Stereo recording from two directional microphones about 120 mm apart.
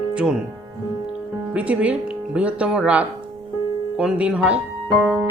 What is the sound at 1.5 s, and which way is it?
Speech, 10° right (ahead or behind).